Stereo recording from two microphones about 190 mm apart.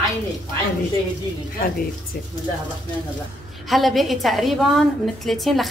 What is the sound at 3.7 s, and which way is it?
A woman's voice, centre (ahead or behind).